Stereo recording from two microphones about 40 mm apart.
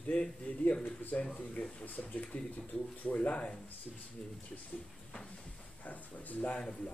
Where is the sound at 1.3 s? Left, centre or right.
Left.